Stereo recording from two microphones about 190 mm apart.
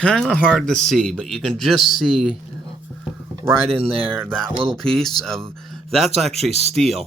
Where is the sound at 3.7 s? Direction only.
30° right (ahead or behind).